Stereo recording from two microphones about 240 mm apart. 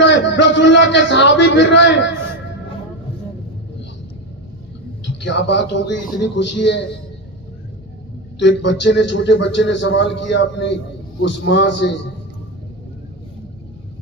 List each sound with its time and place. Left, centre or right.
0.0 s a man's voice: left
5.2 s a man's voice: left
8.4 s a man's voice: left